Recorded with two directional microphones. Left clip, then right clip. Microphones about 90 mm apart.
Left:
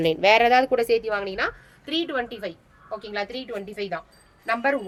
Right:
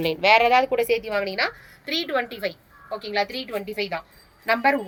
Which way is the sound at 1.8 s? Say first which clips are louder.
Right 2 dB; 25° left (ahead or behind).